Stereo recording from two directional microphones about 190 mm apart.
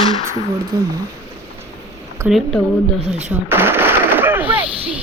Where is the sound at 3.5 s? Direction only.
10° right (ahead or behind).